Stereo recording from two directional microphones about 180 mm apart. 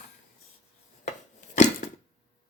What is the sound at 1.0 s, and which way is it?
Chopping, 40° left (ahead or behind).